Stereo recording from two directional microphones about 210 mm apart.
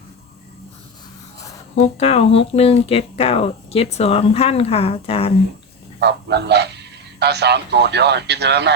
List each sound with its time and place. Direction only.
1.7 s speech: 30° left (ahead or behind)
6.0 s a man's voice: 55° right (ahead or behind)